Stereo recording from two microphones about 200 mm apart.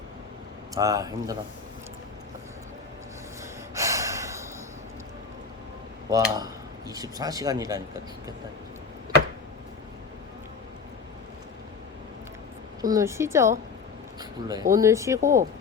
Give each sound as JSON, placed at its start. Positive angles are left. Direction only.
{"t": 0.7, "sound": "speech", "side_deg": -20}
{"t": 3.8, "sound": "gasp", "side_deg": -15}
{"t": 6.3, "sound": "speech", "side_deg": -20}
{"t": 12.8, "sound": "speech", "side_deg": -15}